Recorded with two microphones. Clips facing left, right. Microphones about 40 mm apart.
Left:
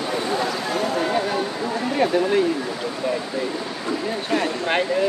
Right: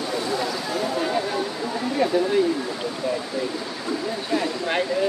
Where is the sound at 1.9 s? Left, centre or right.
Left.